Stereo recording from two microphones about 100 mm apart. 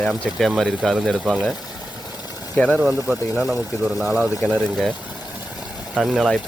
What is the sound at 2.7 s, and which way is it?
Speech, centre (ahead or behind).